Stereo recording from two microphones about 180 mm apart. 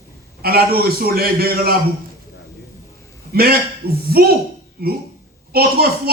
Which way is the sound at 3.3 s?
60° right (ahead or behind).